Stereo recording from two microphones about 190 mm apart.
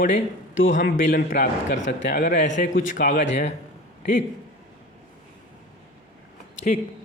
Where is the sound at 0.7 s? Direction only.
45° left (ahead or behind).